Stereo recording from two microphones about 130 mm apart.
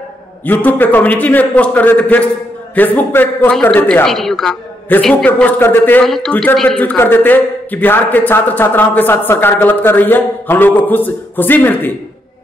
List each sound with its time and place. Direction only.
0.5 s a man's voice: 15° left (ahead or behind)
4.9 s a man's voice: 10° left (ahead or behind)
6.0 s a woman's voice: centre (ahead or behind)